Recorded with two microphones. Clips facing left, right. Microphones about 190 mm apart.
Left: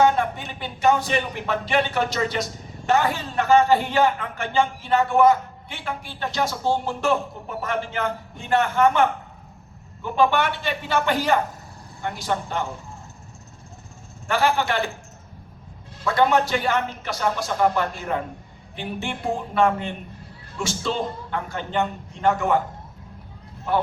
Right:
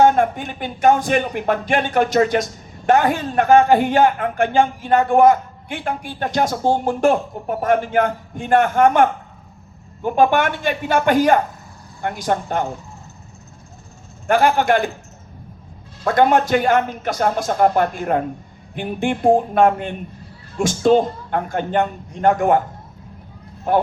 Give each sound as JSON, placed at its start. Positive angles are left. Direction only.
{"t": 0.0, "sound": "speech", "side_deg": -50}
{"t": 14.3, "sound": "speech", "side_deg": -50}
{"t": 16.0, "sound": "speech", "side_deg": -50}
{"t": 23.7, "sound": "speech", "side_deg": -50}